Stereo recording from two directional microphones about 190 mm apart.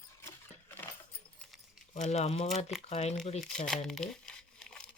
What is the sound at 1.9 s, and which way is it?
Speech, 35° left (ahead or behind).